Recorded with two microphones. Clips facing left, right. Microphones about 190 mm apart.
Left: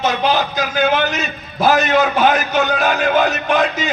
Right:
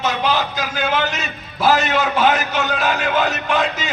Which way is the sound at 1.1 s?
20° left (ahead or behind).